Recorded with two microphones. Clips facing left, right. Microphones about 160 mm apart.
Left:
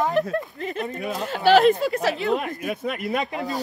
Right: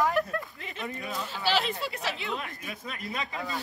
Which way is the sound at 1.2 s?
55° left (ahead or behind).